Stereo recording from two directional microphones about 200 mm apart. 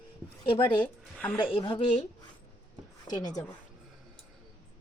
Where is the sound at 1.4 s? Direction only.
25° left (ahead or behind).